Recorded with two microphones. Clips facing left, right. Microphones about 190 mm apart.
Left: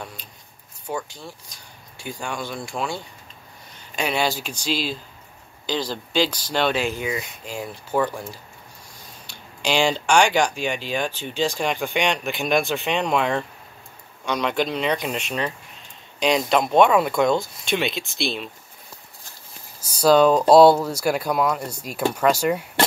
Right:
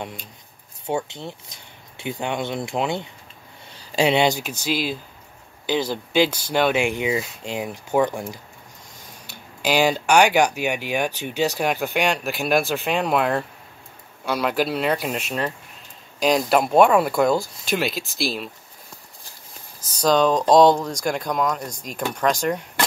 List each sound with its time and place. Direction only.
0.8 s speech: 25° right (ahead or behind)
4.4 s speech: 10° right (ahead or behind)
9.6 s speech: 5° right (ahead or behind)
19.8 s speech: 10° left (ahead or behind)